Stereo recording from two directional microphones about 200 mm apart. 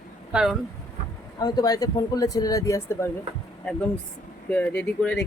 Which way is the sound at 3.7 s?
5° left (ahead or behind).